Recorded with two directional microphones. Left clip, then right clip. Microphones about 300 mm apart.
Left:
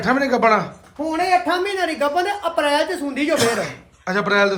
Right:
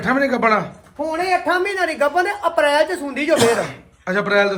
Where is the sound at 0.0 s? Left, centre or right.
Centre.